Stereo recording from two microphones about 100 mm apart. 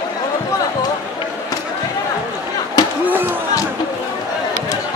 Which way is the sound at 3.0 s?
20° right (ahead or behind).